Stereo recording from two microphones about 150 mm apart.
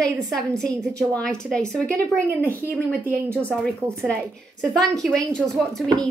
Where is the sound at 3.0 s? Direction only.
15° right (ahead or behind).